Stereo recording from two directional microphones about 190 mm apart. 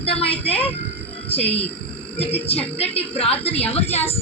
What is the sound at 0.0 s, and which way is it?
A woman's voice, 30° left (ahead or behind).